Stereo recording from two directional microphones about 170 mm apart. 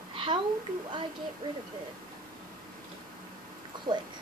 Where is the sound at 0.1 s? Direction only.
30° right (ahead or behind).